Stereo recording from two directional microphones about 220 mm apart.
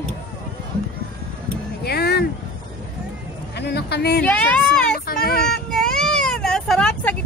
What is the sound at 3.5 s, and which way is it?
Speech, 50° left (ahead or behind).